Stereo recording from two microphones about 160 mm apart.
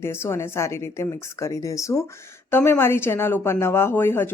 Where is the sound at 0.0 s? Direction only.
15° left (ahead or behind).